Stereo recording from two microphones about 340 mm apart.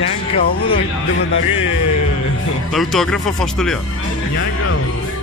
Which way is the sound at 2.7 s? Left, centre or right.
Centre.